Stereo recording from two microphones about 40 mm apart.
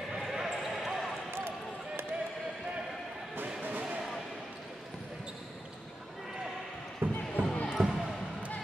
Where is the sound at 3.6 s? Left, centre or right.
Right.